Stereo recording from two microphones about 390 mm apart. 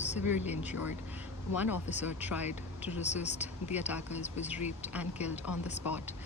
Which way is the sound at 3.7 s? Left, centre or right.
Centre.